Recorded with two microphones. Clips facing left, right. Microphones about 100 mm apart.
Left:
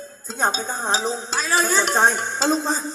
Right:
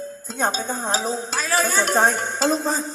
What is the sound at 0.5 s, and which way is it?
Speech, 50° right (ahead or behind).